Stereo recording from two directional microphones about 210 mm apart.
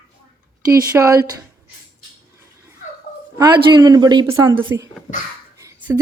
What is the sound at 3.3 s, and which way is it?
Speech, 20° right (ahead or behind).